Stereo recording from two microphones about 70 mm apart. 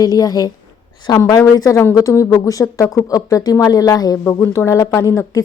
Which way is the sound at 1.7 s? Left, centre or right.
Left.